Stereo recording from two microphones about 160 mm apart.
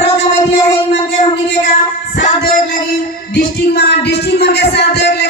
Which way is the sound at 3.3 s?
85° left.